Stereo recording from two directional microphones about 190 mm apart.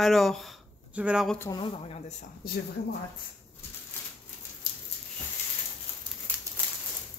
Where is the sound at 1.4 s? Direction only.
25° left (ahead or behind).